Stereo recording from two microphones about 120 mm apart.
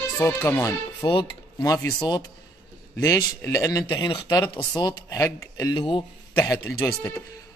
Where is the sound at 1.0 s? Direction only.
35° left (ahead or behind).